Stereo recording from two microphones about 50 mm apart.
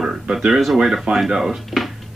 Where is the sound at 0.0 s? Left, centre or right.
Centre.